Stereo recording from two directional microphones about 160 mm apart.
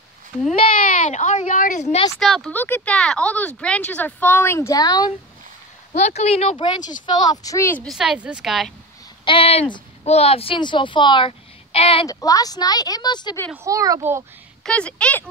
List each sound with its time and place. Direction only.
0.9 s a woman's voice: 50° left (ahead or behind)
2.1 s a woman's voice: centre (ahead or behind)
2.5 s speech: 10° left (ahead or behind)
5.9 s a woman's voice: 45° left (ahead or behind); by 7.8 s 20° left (ahead or behind)
7.8 s a woman's voice: centre (ahead or behind)
9.2 s speech: 35° left (ahead or behind)
12.1 s a woman's voice: 20° left (ahead or behind)
13.7 s a child's voice: 20° right (ahead or behind)
14.6 s speech: 5° left (ahead or behind)